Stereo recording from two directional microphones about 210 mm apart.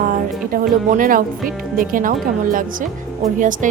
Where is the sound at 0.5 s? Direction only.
40° right (ahead or behind).